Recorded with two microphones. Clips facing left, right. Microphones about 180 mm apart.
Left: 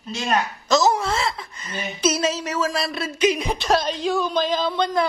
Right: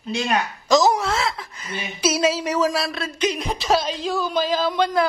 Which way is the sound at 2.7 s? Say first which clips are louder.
Even; centre (ahead or behind).